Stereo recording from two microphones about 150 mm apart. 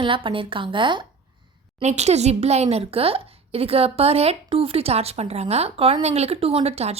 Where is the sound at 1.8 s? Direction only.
45° right (ahead or behind).